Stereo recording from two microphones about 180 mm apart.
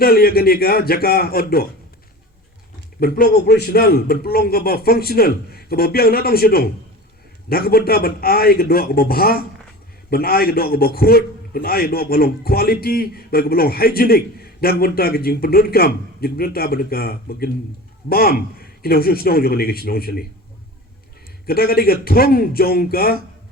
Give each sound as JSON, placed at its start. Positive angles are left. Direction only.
{"t": 0.0, "sound": "a man's voice", "side_deg": 55}
{"t": 3.0, "sound": "a man's voice", "side_deg": 55}
{"t": 21.4, "sound": "a man's voice", "side_deg": 55}